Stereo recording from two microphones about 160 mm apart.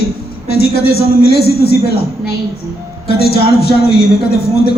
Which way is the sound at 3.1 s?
80° left.